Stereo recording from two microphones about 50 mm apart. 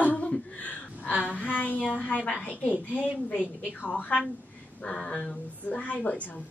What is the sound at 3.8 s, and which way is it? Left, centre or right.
A woman's voice, left.